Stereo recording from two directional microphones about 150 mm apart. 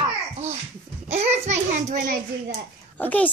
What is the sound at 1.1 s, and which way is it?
A child's voice, 45° right (ahead or behind).